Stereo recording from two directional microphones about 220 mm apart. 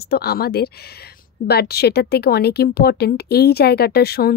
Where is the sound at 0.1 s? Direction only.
45° left (ahead or behind).